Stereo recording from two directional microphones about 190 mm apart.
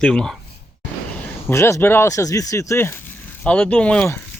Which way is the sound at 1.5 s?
15° left (ahead or behind).